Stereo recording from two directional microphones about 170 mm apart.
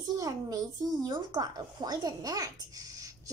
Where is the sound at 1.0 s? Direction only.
25° right (ahead or behind).